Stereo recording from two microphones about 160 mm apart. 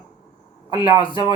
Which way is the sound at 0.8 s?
30° left (ahead or behind).